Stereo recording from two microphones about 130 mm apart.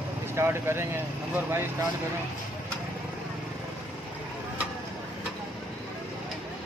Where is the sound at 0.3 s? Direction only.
20° right (ahead or behind).